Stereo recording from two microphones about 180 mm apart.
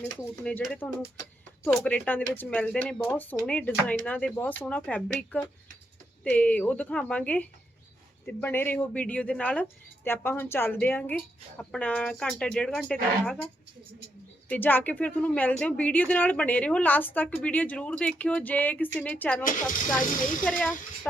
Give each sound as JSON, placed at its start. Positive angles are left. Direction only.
{"t": 0.0, "sound": "speech", "side_deg": 10}
{"t": 6.2, "sound": "speech", "side_deg": 10}
{"t": 14.5, "sound": "speech", "side_deg": 10}